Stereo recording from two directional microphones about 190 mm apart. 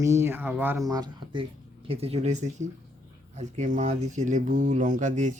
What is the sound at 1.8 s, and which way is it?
Speech, 30° right (ahead or behind).